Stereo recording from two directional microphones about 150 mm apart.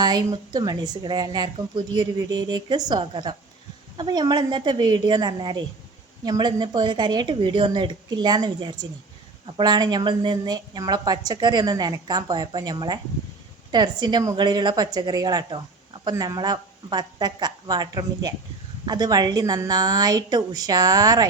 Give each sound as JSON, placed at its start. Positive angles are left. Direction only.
{"t": 0.5, "sound": "a woman's voice", "side_deg": -25}